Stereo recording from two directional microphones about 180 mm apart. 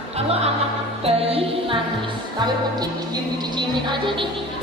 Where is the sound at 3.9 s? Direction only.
25° right (ahead or behind).